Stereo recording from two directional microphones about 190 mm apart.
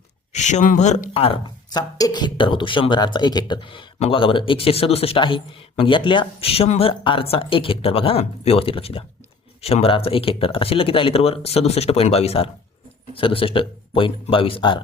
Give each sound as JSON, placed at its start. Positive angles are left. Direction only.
{"t": 0.3, "sound": "speech", "side_deg": 40}